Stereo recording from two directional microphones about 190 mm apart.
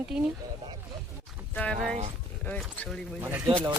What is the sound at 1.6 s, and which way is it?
Speech, 5° left (ahead or behind).